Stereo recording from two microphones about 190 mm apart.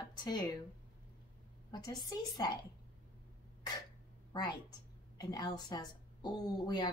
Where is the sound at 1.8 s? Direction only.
20° left (ahead or behind).